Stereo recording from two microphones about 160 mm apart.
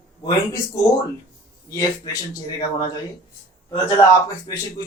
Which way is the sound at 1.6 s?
20° left (ahead or behind).